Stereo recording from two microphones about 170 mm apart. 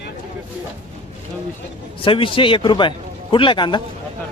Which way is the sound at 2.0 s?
30° left (ahead or behind).